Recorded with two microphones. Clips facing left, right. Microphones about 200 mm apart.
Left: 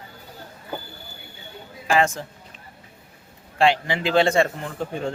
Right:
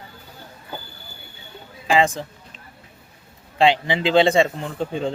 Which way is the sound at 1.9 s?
15° right (ahead or behind).